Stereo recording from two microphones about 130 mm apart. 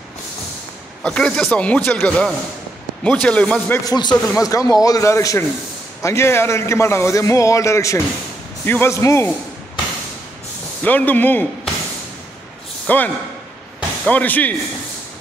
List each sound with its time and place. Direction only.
1.0 s speech: 5° left (ahead or behind)
3.8 s a man's voice: 30° left (ahead or behind)
10.8 s speech: 10° left (ahead or behind)
12.8 s a man's voice: 15° left (ahead or behind)